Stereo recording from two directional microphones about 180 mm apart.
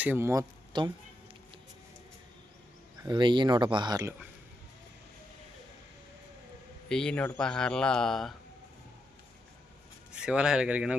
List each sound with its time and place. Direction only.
0.0 s speech: 10° right (ahead or behind)
3.0 s speech: 25° right (ahead or behind)
6.8 s speech: 5° left (ahead or behind)
10.2 s speech: 5° right (ahead or behind)